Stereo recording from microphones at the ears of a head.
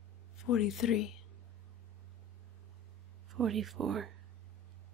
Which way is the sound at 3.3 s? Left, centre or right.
Right.